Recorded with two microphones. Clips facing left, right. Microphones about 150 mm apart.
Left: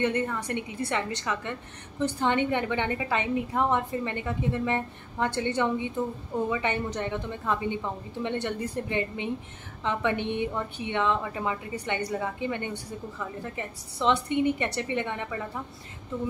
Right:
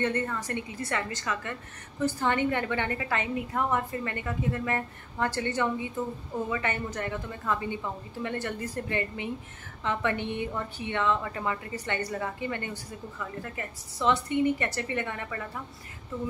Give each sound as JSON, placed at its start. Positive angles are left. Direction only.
{"t": 0.0, "sound": "a woman's voice", "side_deg": 15}
{"t": 6.5, "sound": "a woman's voice", "side_deg": 20}